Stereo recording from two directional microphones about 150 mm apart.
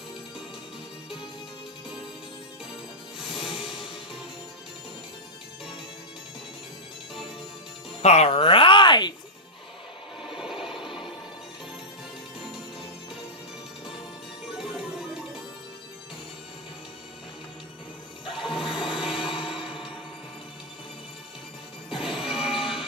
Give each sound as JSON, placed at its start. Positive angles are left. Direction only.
{"t": 3.3, "sound": "music", "side_deg": -5}
{"t": 8.0, "sound": "music", "side_deg": 45}
{"t": 10.3, "sound": "wood", "side_deg": -5}
{"t": 14.6, "sound": "music", "side_deg": -5}
{"t": 18.4, "sound": "music", "side_deg": -5}
{"t": 21.9, "sound": "smash", "side_deg": 0}